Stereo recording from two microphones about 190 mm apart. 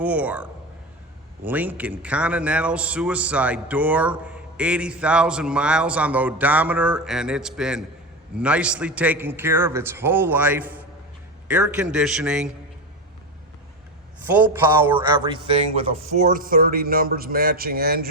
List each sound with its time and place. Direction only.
0.0 s a man's voice: 10° right (ahead or behind)
1.5 s a man's voice: 10° right (ahead or behind)
14.3 s a man's voice: 10° right (ahead or behind)
14.9 s speech: 25° right (ahead or behind)
16.1 s speech: 45° right (ahead or behind)